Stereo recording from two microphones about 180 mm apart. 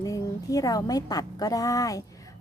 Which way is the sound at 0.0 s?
20° left (ahead or behind).